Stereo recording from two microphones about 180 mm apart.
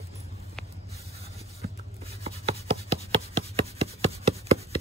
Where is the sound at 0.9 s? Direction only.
35° right (ahead or behind).